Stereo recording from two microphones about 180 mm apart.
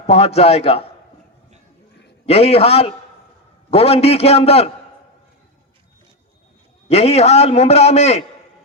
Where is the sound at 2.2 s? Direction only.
35° left (ahead or behind).